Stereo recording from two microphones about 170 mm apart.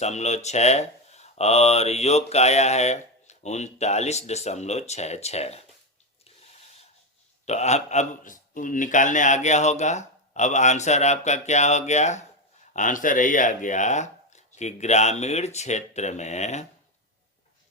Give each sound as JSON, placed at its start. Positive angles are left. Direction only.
{"t": 0.0, "sound": "speech", "side_deg": 40}
{"t": 7.4, "sound": "a man's voice", "side_deg": 40}